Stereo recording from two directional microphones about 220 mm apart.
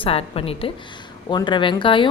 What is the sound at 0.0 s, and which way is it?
A woman's voice, 25° left (ahead or behind).